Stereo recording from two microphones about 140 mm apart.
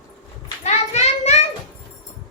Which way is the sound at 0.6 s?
55° left (ahead or behind).